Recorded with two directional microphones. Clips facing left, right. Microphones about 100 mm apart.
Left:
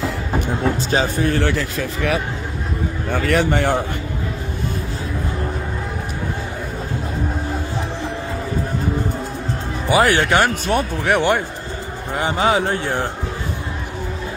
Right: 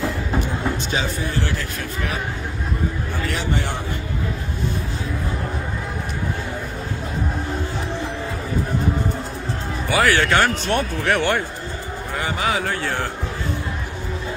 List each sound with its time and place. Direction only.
0.7 s speech: 40° left (ahead or behind); by 2.1 s 90° left
3.1 s speech: 60° left (ahead or behind)
9.8 s speech: 20° left (ahead or behind)
12.2 s speech: 30° left (ahead or behind)